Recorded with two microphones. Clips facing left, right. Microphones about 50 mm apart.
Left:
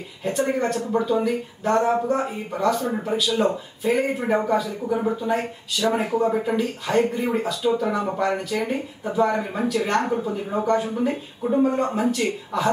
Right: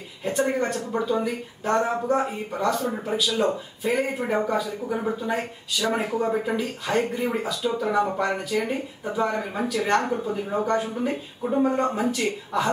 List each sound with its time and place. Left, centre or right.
0.2 s speech: centre